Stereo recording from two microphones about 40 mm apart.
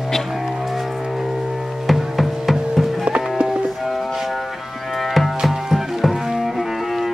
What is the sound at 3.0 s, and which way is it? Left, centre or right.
Music, right.